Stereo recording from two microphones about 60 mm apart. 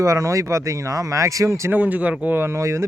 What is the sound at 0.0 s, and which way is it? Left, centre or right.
A man's voice, right.